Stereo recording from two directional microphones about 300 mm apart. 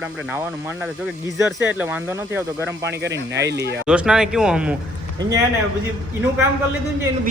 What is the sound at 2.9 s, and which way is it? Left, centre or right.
Speech, right.